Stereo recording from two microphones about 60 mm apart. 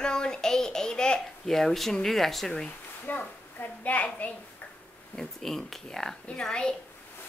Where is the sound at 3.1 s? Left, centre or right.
Left.